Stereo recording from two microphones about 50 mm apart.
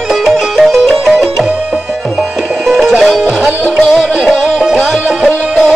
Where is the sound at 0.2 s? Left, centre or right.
Centre.